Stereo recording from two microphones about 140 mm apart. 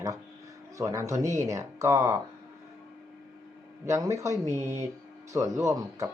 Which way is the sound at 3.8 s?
20° right (ahead or behind).